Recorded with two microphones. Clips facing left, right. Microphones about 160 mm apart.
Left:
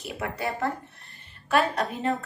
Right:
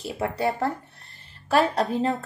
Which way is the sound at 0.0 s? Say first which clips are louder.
Right 5 dB; 30° right (ahead or behind).